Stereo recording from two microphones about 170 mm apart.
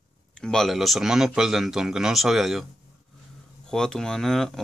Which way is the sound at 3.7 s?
5° left (ahead or behind).